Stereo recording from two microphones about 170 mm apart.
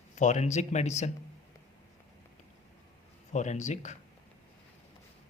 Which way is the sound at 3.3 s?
45° left (ahead or behind).